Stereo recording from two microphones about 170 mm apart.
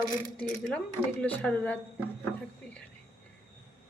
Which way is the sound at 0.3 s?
5° left (ahead or behind).